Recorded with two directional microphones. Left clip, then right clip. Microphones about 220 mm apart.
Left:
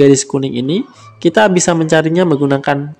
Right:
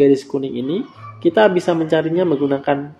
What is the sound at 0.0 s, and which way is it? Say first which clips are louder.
A man's voice: left 4 dB; 45° left (ahead or behind).